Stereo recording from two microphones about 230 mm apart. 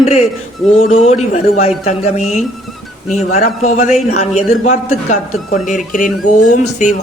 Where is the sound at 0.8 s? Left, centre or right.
Left.